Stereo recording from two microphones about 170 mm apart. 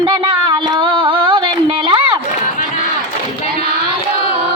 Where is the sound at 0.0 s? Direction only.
25° right (ahead or behind).